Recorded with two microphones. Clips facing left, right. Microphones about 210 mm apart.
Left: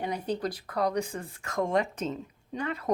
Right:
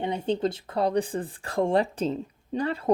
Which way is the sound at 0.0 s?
25° right (ahead or behind).